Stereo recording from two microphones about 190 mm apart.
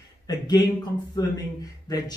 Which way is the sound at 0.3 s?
20° left (ahead or behind).